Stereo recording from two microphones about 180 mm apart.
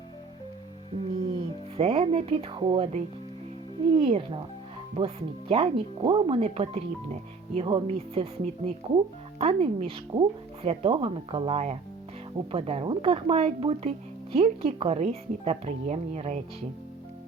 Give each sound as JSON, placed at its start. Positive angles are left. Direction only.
{"t": 1.3, "sound": "speech", "side_deg": -35}